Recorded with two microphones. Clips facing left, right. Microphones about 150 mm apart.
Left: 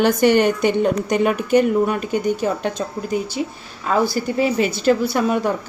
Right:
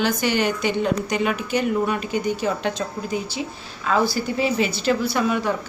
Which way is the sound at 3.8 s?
45° left (ahead or behind).